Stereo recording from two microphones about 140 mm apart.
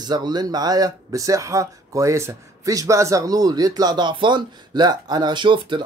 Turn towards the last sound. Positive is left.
turn(degrees=-35)  # may be behind; listen again after turning